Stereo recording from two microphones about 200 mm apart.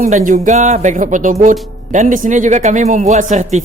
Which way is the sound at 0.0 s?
40° right (ahead or behind).